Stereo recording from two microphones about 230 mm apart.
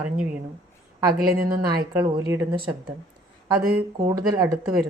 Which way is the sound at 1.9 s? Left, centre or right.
Centre.